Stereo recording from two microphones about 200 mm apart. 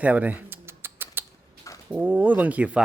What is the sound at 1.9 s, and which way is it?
Speech, 10° right (ahead or behind).